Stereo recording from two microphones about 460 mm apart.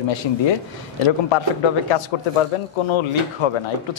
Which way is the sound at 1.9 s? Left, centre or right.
Left.